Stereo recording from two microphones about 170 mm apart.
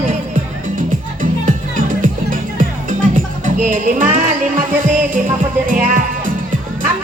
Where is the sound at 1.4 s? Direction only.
50° right (ahead or behind).